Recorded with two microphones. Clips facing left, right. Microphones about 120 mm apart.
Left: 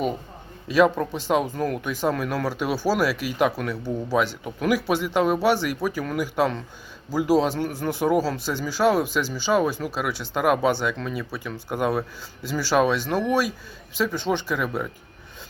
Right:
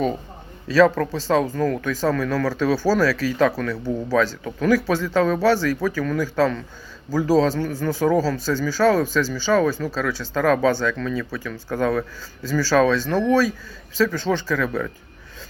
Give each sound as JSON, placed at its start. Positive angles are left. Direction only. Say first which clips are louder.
{"t": 0.7, "sound": "speech", "louder": "right 3 dB", "side_deg": 15}